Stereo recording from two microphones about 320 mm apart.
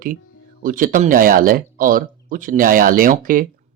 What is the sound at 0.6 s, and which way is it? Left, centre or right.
Speech, right.